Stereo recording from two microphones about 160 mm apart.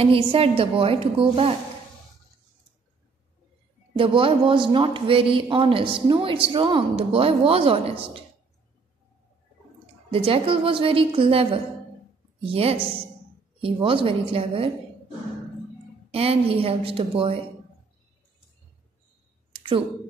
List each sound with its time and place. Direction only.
0.0 s speech: 35° right (ahead or behind)
3.9 s speech: 35° right (ahead or behind)
10.1 s speech: 35° right (ahead or behind)
16.1 s speech: 40° right (ahead or behind)